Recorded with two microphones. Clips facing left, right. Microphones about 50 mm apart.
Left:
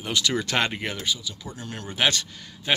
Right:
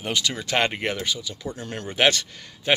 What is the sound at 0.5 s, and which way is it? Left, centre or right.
Speech, right.